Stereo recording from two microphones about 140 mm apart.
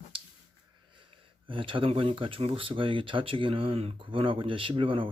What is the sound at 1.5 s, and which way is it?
Speech, 40° right (ahead or behind).